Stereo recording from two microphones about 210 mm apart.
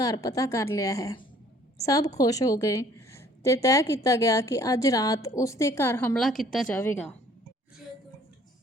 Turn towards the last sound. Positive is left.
turn(degrees=10)  # may be behind; listen again after turning